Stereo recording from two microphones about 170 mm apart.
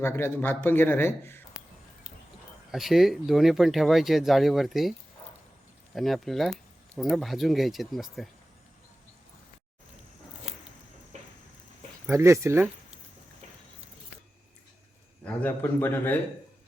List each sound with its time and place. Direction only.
0.0 s a man's voice: 15° left (ahead or behind)
2.7 s speech: centre (ahead or behind)
11.1 s a sound: 45° right (ahead or behind)
12.0 s speech: 15° right (ahead or behind)
15.2 s a man's voice: 10° left (ahead or behind)